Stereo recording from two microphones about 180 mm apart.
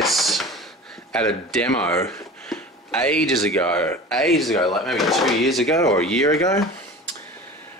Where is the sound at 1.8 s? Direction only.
15° left (ahead or behind).